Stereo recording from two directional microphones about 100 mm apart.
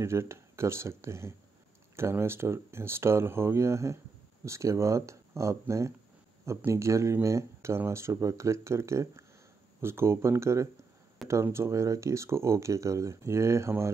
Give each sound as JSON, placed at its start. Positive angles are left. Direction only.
{"t": 0.0, "sound": "speech", "side_deg": -25}